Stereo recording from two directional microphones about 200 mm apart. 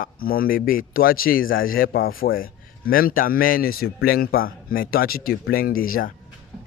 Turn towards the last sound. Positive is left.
turn(degrees=45)  # may be behind; listen again after turning